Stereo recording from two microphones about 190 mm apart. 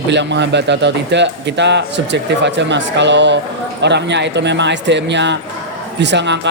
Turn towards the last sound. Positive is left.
turn(degrees=-65)  # may be behind; listen again after turning